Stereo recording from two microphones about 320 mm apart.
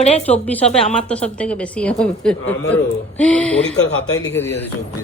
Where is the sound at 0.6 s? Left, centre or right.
Centre.